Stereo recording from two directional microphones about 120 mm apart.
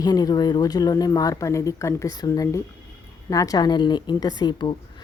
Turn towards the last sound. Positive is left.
turn(degrees=35)  # may be behind; listen again after turning